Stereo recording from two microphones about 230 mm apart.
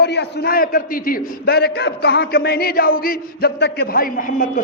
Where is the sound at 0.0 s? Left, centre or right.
Left.